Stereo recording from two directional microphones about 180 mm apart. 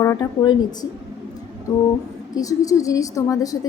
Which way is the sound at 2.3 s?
20° left (ahead or behind).